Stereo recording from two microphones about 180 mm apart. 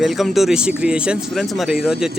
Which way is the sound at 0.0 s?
Centre (ahead or behind).